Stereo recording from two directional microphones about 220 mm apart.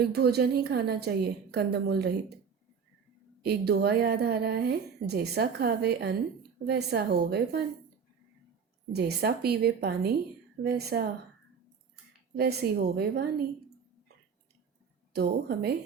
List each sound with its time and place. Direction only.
0.0 s a woman's voice: 45° right (ahead or behind)
3.4 s a woman's voice: 45° right (ahead or behind)
8.9 s a woman's voice: 50° right (ahead or behind)
12.3 s a woman's voice: 45° right (ahead or behind)
15.1 s a woman's voice: 45° right (ahead or behind)